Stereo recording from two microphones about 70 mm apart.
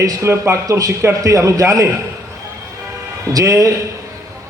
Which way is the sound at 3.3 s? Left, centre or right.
Right.